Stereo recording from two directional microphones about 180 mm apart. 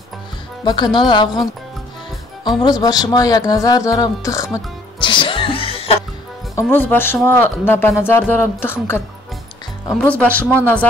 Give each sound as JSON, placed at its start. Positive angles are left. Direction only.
{"t": 0.7, "sound": "speech", "side_deg": 25}
{"t": 5.0, "sound": "music", "side_deg": 25}
{"t": 6.5, "sound": "speech", "side_deg": 10}
{"t": 10.0, "sound": "speech", "side_deg": 5}